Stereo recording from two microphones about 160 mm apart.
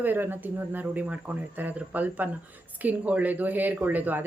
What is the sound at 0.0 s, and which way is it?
Speech, 10° right (ahead or behind).